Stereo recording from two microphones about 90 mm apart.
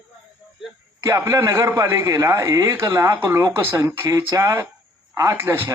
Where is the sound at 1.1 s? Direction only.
30° right (ahead or behind).